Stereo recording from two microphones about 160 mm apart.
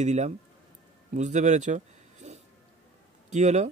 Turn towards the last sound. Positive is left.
turn(degrees=-45)  # may be behind; listen again after turning